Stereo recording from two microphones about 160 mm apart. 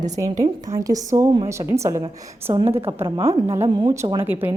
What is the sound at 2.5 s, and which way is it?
A woman's voice, 35° right (ahead or behind).